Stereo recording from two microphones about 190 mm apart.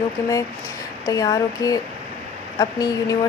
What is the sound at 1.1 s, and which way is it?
Speech, 20° left (ahead or behind).